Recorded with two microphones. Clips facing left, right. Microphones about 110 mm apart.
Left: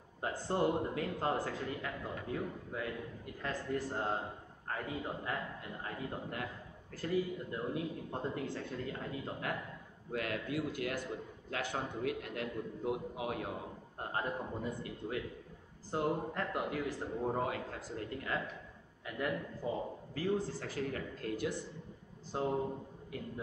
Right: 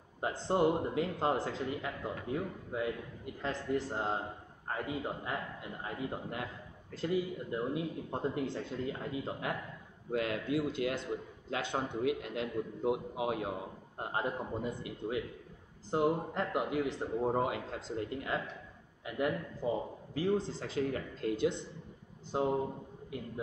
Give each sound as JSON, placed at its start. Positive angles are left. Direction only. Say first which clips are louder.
{"t": 0.2, "sound": "a man's voice", "louder": "right 4 dB", "side_deg": -20}